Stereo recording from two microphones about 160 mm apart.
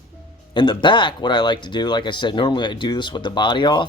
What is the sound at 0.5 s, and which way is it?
Speech, 30° left (ahead or behind).